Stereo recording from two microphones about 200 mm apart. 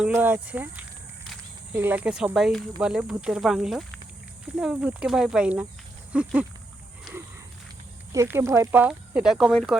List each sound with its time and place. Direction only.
0.0 s speech: 10° right (ahead or behind)
8.1 s speech: 15° right (ahead or behind)